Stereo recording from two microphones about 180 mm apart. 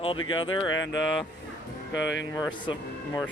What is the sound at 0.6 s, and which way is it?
Speech, 90° left.